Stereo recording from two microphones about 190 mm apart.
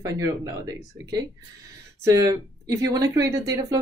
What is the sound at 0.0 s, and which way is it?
Speech, 15° right (ahead or behind).